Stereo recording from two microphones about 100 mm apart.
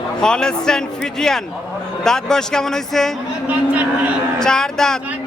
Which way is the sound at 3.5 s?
15° right (ahead or behind).